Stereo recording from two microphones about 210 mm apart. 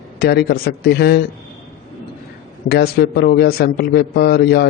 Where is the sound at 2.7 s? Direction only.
50° left (ahead or behind).